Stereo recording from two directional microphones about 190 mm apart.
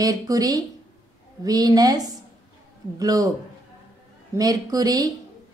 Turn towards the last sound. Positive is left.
turn(degrees=-20)  # may be behind; listen again after turning